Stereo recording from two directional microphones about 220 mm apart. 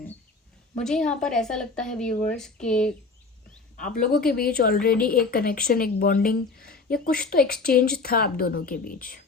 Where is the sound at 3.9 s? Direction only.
40° left (ahead or behind).